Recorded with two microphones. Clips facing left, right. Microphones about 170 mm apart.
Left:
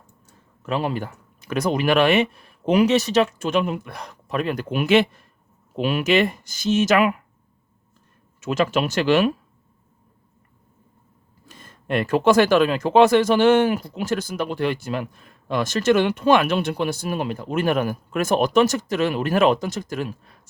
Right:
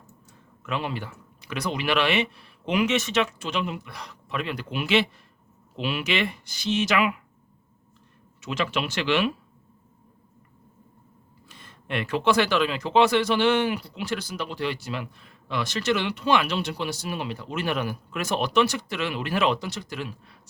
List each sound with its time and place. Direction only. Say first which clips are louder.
0.6 s speech: left 6 dB; 40° left (ahead or behind)
8.4 s speech: left 7 dB; 45° left (ahead or behind)
11.4 s speech: left 8 dB; 45° left (ahead or behind)